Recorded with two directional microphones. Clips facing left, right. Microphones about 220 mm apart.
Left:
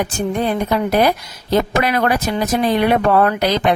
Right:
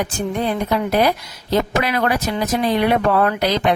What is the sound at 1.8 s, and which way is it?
Speech, 45° left (ahead or behind).